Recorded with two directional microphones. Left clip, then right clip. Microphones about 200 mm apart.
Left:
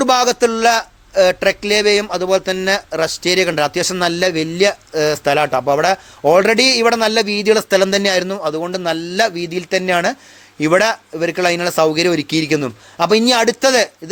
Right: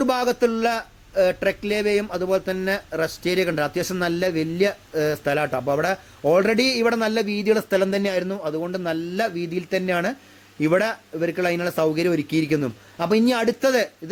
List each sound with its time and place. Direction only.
0.0 s a man's voice: 5° left (ahead or behind)